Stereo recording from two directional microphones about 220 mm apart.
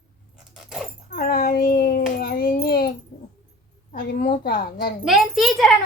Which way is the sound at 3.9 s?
35° left (ahead or behind).